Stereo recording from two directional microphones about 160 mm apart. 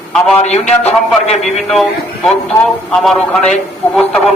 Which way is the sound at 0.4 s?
45° left (ahead or behind).